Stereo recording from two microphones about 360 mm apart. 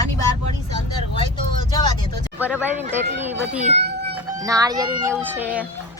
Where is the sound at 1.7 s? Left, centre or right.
Centre.